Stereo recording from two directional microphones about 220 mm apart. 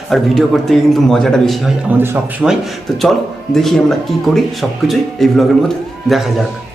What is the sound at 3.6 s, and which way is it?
A man's voice, centre (ahead or behind).